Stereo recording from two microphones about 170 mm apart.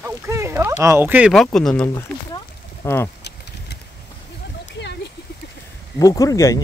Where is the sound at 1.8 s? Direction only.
15° left (ahead or behind).